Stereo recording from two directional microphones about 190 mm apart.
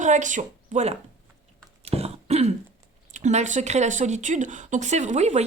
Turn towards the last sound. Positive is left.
turn(degrees=-35)  # may be behind; listen again after turning